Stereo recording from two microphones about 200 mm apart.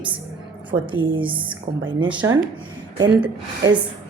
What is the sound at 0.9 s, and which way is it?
Speech, 25° right (ahead or behind).